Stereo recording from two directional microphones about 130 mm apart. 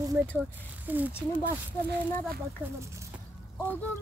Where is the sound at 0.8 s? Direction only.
15° right (ahead or behind).